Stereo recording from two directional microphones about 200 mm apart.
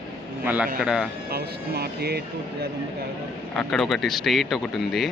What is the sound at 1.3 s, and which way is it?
Speech, 50° right (ahead or behind).